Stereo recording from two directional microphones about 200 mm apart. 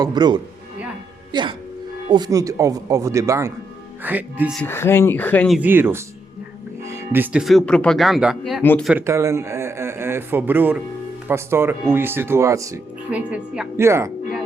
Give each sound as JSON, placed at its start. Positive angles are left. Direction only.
{"t": 0.0, "sound": "speech", "side_deg": -20}
{"t": 4.5, "sound": "speech", "side_deg": 10}
{"t": 5.5, "sound": "speech", "side_deg": -10}
{"t": 8.6, "sound": "speech", "side_deg": 10}
{"t": 8.9, "sound": "speech", "side_deg": -10}